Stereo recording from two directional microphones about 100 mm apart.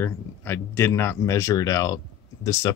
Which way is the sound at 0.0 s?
25° left (ahead or behind).